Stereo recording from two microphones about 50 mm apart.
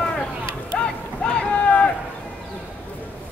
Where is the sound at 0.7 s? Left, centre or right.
Centre.